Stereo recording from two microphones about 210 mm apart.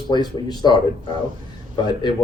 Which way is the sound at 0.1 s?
20° left (ahead or behind).